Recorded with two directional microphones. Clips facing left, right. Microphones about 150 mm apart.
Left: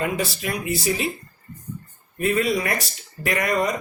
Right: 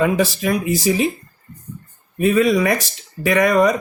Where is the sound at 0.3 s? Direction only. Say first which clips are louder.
Right 7 dB; 90° right.